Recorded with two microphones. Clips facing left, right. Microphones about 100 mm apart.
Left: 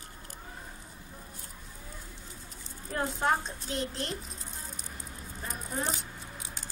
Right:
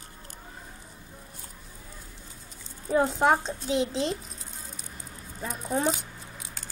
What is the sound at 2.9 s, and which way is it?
A child's voice, 90° right.